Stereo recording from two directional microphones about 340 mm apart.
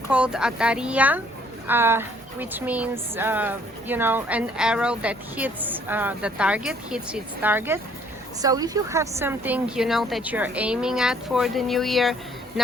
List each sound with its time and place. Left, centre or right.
0.1 s a woman's voice: centre